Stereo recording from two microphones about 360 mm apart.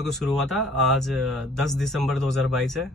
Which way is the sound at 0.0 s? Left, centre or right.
Centre.